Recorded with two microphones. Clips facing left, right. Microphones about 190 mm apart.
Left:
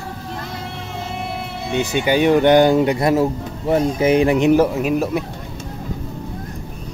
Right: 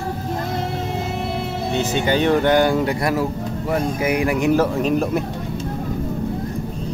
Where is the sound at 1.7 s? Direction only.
15° left (ahead or behind).